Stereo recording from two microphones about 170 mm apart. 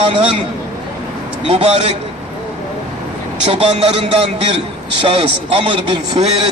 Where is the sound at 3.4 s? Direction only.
35° right (ahead or behind).